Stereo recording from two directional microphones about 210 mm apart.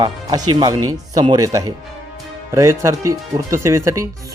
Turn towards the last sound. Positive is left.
turn(degrees=-15)  # may be behind; listen again after turning